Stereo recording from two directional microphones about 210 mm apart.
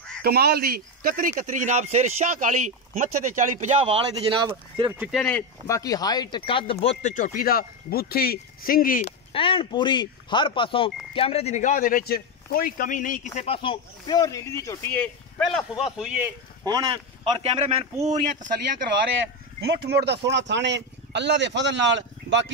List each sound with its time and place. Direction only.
0.2 s speech: 50° right (ahead or behind)
3.9 s speech: 25° right (ahead or behind)
4.9 s speech: 5° right (ahead or behind)
5.2 s speech: 10° left (ahead or behind); by 9.0 s 40° left (ahead or behind)
9.0 s a man's voice: 25° left (ahead or behind); by 16.3 s centre (ahead or behind)
16.7 s speech: 20° right (ahead or behind)
19.6 s speech: 50° right (ahead or behind)